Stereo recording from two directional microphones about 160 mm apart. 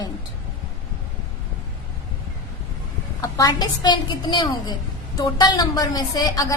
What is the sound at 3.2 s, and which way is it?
A woman's voice, 25° left (ahead or behind).